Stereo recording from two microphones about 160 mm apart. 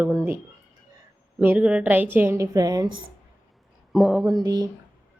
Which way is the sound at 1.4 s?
10° right (ahead or behind).